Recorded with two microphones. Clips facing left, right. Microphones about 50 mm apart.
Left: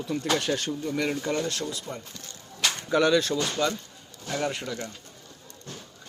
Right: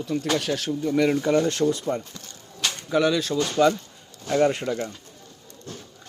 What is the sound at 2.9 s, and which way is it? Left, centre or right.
Speech, centre.